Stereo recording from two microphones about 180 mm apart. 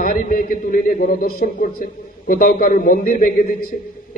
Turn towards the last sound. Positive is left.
turn(degrees=45)  # may be behind; listen again after turning